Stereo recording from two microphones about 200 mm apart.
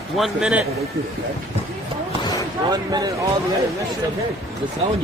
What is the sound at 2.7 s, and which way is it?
Speech, 20° right (ahead or behind).